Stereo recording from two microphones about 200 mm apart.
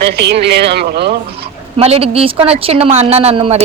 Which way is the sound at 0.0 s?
55° right (ahead or behind).